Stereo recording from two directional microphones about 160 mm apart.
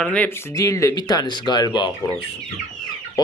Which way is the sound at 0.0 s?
10° left (ahead or behind).